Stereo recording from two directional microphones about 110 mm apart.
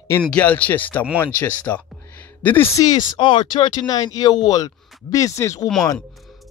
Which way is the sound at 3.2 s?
50° left (ahead or behind).